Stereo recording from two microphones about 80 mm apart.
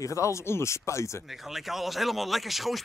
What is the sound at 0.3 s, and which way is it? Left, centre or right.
Speech, left.